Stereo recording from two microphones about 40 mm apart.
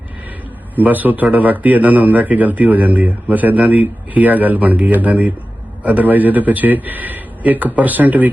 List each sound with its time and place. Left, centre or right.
0.8 s speech: right